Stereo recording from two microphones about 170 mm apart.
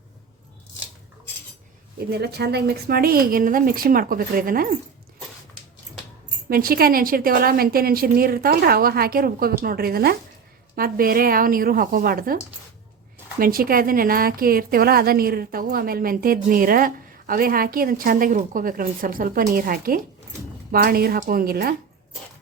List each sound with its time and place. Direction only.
2.0 s a woman's voice: 70° right (ahead or behind)
6.5 s a woman's voice: 60° right (ahead or behind)
13.4 s a woman's voice: 60° right (ahead or behind)